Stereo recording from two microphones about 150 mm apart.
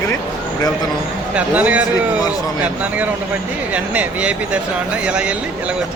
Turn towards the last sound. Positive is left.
turn(degrees=-5)  # may be behind; listen again after turning